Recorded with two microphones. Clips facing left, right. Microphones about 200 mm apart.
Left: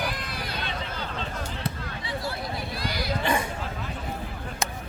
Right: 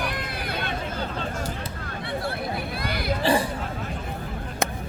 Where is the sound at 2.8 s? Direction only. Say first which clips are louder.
Right 2 dB; 55° right (ahead or behind).